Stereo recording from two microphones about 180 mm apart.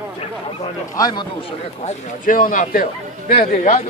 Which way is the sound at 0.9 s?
25° left (ahead or behind).